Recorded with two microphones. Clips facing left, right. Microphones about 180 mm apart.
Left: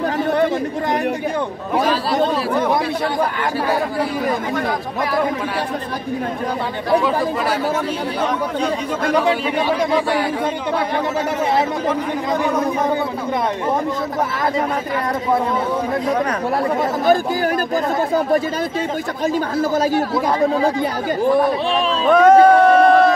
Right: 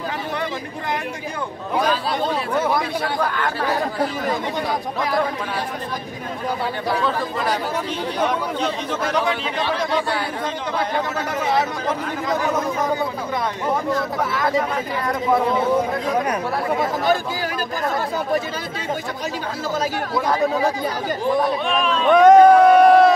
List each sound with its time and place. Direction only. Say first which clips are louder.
9.7 s speech: left 4 dB; 10° left (ahead or behind)
21.7 s speech: left 2 dB; 35° left (ahead or behind)
22.1 s speech: even; centre (ahead or behind)